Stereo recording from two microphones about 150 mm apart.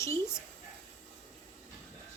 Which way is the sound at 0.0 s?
20° left (ahead or behind).